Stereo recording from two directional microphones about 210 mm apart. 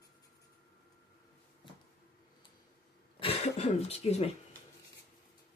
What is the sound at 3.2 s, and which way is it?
Speech, 30° left (ahead or behind).